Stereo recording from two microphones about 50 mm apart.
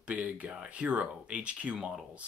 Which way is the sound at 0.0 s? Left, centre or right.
Right.